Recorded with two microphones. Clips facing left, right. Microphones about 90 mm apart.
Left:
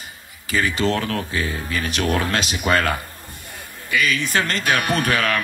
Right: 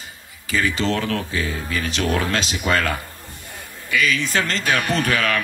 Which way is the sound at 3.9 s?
55° left (ahead or behind).